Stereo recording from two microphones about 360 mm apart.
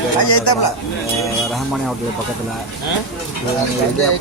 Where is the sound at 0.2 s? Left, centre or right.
Left.